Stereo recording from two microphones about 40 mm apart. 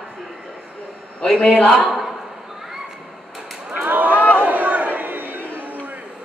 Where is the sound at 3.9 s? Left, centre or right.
Right.